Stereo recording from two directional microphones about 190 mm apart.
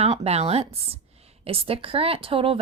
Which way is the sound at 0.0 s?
35° right (ahead or behind).